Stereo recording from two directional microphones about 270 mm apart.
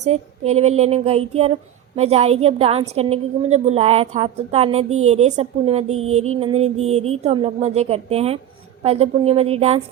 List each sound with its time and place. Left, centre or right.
0.0 s a woman's voice: right